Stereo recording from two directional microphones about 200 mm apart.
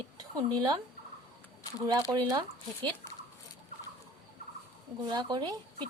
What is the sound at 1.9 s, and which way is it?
Speech, 20° right (ahead or behind).